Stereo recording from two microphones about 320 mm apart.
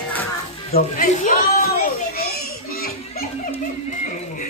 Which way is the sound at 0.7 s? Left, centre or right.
Left.